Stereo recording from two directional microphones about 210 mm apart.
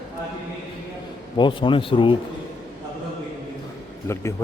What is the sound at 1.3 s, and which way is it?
Speech, 20° left (ahead or behind).